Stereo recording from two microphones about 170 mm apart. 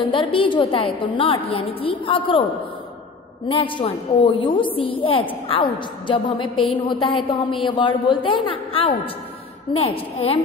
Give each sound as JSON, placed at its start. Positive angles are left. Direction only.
{"t": 0.1, "sound": "a woman's voice", "side_deg": 30}
{"t": 3.4, "sound": "a woman's voice", "side_deg": 30}